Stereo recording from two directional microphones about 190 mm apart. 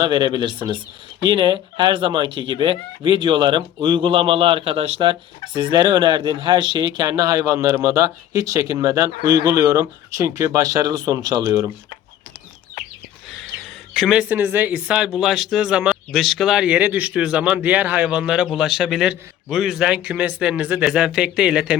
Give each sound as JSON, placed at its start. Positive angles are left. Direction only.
{"t": 0.0, "sound": "speech", "side_deg": -20}
{"t": 13.9, "sound": "speech", "side_deg": 0}